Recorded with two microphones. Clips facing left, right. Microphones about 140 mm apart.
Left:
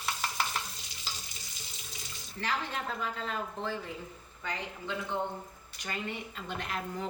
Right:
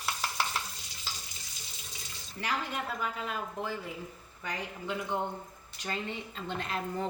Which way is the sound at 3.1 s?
10° right (ahead or behind).